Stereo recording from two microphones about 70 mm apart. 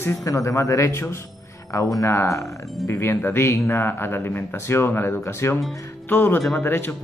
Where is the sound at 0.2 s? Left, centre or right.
Left.